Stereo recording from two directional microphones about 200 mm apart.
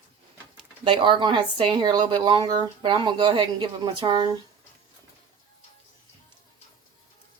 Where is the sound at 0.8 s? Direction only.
25° right (ahead or behind).